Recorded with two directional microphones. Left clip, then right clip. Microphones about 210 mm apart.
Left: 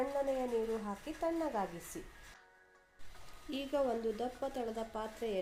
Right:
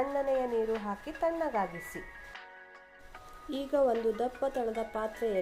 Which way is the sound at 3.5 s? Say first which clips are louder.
Right 7 dB; 10° right (ahead or behind).